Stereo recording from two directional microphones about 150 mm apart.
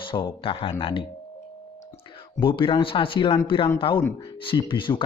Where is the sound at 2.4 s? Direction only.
35° left (ahead or behind).